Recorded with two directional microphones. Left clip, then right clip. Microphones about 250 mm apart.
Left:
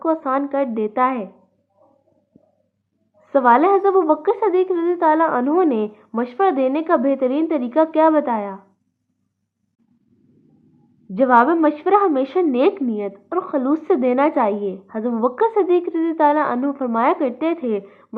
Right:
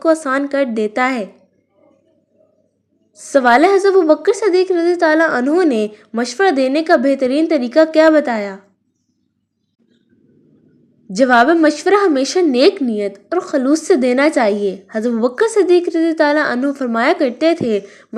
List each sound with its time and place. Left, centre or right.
0.0 s a woman's voice: right
3.2 s a woman's voice: right
11.1 s a woman's voice: right